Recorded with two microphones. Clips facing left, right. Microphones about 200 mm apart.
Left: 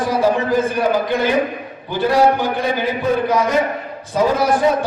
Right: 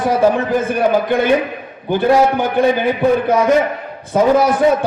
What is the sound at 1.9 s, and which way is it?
A man's voice, 55° right (ahead or behind).